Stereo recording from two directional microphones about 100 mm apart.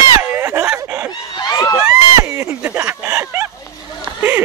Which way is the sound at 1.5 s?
40° left (ahead or behind).